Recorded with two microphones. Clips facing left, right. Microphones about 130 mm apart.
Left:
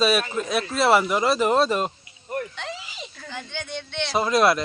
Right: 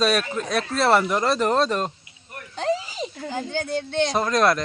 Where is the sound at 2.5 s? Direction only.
35° right (ahead or behind).